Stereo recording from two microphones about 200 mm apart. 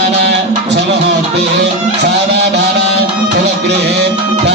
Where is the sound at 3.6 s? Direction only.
55° right (ahead or behind).